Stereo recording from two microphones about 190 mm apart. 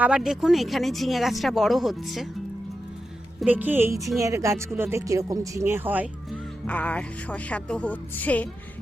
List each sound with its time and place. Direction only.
0.0 s speech: 5° right (ahead or behind)
3.4 s speech: 10° right (ahead or behind)
6.7 s speech: 5° left (ahead or behind)